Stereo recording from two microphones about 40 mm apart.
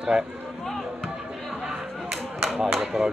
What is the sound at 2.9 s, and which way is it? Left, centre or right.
Speech, centre.